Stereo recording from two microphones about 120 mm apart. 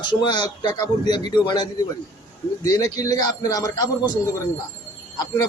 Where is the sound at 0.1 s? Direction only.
40° left (ahead or behind).